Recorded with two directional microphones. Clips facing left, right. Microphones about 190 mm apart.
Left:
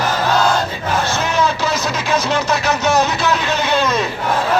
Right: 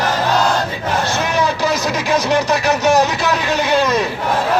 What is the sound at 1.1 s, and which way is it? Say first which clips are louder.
Speech: even; 15° right (ahead or behind).